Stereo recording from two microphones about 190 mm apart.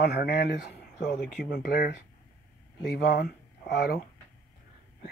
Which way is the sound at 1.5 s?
50° left (ahead or behind).